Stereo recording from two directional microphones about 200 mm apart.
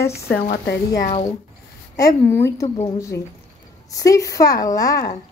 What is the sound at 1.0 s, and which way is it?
Speech, 35° left (ahead or behind).